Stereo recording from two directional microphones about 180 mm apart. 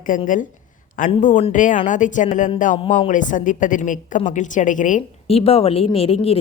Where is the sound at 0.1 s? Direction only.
45° left (ahead or behind).